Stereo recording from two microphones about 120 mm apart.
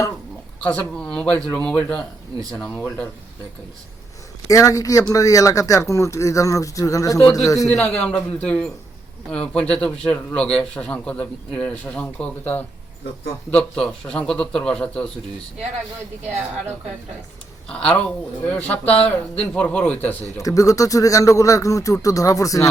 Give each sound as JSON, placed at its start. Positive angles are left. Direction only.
{"t": 0.6, "sound": "a man's voice", "side_deg": 10}
{"t": 4.4, "sound": "speech", "side_deg": 30}
{"t": 7.7, "sound": "a man's voice", "side_deg": 10}
{"t": 17.7, "sound": "a man's voice", "side_deg": 10}
{"t": 20.4, "sound": "speech", "side_deg": 30}